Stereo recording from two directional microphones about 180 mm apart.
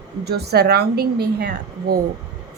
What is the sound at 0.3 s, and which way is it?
Speech, 65° right (ahead or behind).